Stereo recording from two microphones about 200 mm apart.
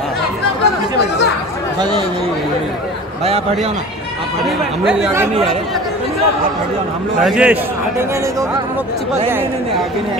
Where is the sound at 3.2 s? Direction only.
30° right (ahead or behind).